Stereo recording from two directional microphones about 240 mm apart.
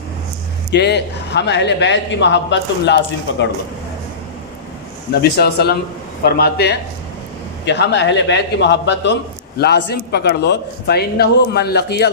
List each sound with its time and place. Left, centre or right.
0.7 s a man's voice: left
5.2 s a man's voice: left